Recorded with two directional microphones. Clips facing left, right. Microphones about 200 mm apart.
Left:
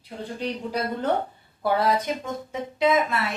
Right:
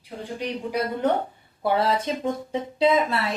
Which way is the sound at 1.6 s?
25° right (ahead or behind).